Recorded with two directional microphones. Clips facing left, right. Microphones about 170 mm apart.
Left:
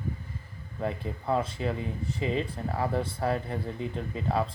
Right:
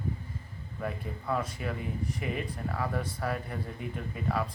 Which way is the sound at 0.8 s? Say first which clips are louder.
Left 4 dB; 25° left (ahead or behind).